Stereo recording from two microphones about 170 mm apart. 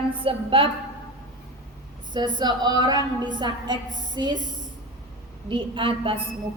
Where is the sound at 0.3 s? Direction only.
30° right (ahead or behind).